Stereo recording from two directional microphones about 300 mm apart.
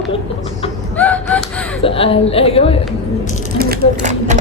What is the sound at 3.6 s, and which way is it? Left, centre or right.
Speech, right.